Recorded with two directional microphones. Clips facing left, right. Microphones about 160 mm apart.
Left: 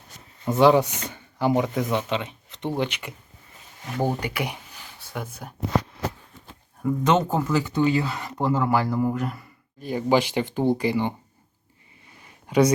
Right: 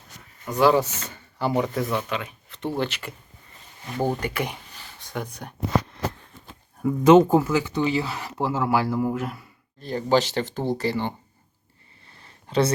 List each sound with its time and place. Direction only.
0.4 s speech: 25° left (ahead or behind); by 5.5 s 5° left (ahead or behind)
6.8 s speech: 10° right (ahead or behind)
9.8 s speech: 10° left (ahead or behind)
12.1 s a sound: 15° left (ahead or behind)